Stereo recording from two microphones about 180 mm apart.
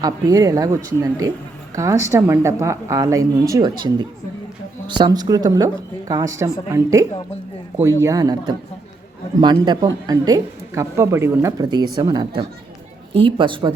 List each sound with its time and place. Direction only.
0.0 s a woman's voice: 20° right (ahead or behind)
8.0 s a woman's voice: 20° right (ahead or behind)